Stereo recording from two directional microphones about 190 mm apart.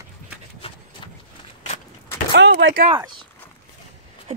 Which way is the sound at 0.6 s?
30° left (ahead or behind).